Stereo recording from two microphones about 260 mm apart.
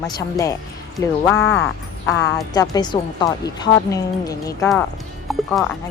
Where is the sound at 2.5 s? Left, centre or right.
Centre.